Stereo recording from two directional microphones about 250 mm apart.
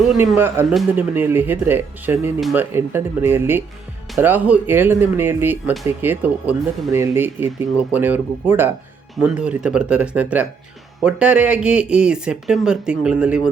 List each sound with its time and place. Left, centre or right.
0.0 s speech: centre